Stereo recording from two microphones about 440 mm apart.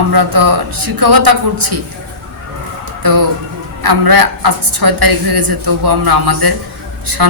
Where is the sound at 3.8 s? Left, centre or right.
Right.